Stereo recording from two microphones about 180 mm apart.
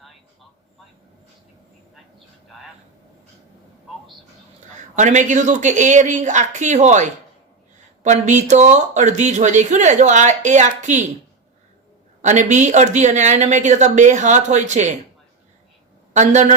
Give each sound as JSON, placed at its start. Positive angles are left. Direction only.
{"t": 4.9, "sound": "speech", "side_deg": -40}
{"t": 12.2, "sound": "speech", "side_deg": -40}
{"t": 16.1, "sound": "speech", "side_deg": -40}